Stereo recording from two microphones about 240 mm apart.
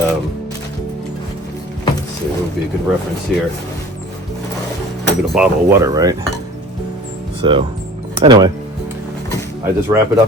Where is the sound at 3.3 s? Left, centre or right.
Centre.